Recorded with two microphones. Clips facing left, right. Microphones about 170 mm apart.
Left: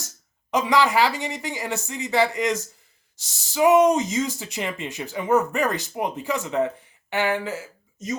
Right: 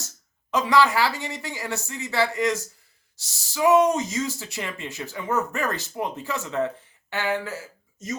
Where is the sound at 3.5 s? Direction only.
15° left (ahead or behind).